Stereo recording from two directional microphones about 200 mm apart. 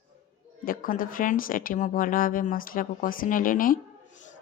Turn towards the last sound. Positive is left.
turn(degrees=45)  # may be behind; listen again after turning